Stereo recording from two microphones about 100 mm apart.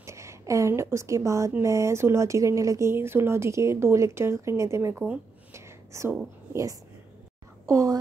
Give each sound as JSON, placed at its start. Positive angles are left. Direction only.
{"t": 0.0, "sound": "a sound", "side_deg": -30}
{"t": 1.6, "sound": "speech", "side_deg": -30}
{"t": 5.5, "sound": "whispering", "side_deg": -25}
{"t": 6.5, "sound": "speech", "side_deg": -35}